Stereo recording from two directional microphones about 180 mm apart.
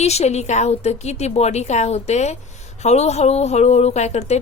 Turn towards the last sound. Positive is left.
turn(degrees=40)  # may be behind; listen again after turning